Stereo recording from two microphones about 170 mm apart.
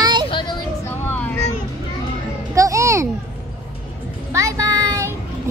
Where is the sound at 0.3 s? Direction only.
30° left (ahead or behind).